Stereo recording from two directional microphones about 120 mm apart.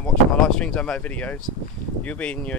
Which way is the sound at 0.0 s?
5° left (ahead or behind).